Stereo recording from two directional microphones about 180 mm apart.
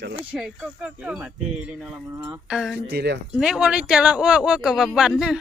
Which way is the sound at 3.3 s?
5° right (ahead or behind).